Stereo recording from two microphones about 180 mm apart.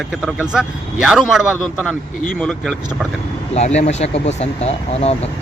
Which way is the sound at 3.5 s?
40° left (ahead or behind).